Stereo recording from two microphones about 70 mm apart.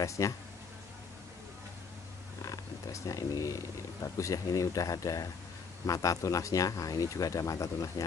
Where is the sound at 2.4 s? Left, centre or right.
Left.